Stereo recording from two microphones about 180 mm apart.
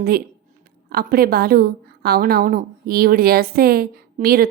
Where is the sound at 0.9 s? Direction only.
55° right (ahead or behind).